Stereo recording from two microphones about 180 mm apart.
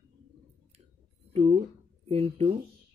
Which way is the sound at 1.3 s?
35° right (ahead or behind).